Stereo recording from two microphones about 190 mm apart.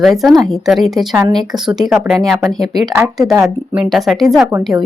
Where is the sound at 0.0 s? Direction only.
Centre (ahead or behind).